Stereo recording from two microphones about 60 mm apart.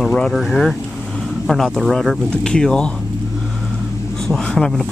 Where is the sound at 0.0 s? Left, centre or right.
Centre.